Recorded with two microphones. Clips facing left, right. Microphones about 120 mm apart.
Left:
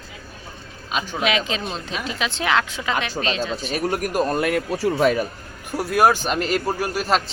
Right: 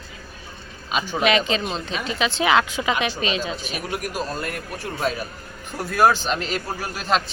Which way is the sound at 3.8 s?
45° left (ahead or behind).